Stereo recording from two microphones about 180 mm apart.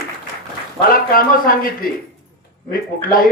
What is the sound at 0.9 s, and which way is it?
Speech, 50° left (ahead or behind).